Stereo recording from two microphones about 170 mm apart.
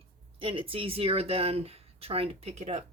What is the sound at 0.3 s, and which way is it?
Speech, 30° right (ahead or behind).